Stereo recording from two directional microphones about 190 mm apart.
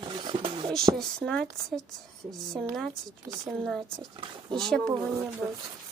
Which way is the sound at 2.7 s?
Centre (ahead or behind).